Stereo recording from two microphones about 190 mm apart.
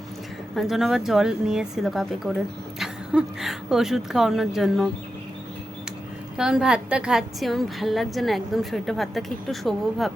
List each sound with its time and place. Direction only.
0.5 s a woman's voice: centre (ahead or behind)
6.3 s a woman's voice: 5° right (ahead or behind)